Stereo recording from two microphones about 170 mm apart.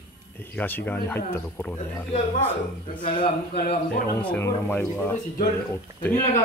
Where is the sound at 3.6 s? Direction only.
65° left (ahead or behind).